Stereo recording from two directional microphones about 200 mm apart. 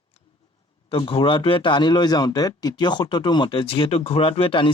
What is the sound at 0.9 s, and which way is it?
Speech, 25° left (ahead or behind).